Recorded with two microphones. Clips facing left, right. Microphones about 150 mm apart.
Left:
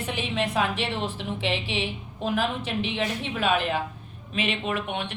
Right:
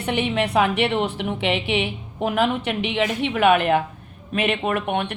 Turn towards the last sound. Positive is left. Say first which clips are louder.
# right 6 dB
turn(degrees=-55)  # may be behind; listen again after turning